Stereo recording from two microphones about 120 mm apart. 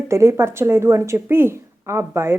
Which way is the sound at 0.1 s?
25° right (ahead or behind).